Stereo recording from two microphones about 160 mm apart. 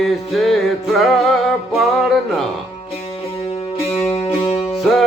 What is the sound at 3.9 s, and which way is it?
Music, 40° left (ahead or behind).